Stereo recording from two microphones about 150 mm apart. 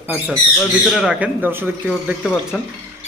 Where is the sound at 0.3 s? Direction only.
Centre (ahead or behind).